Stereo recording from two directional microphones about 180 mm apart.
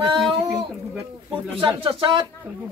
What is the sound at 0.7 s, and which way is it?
Speech, 5° right (ahead or behind).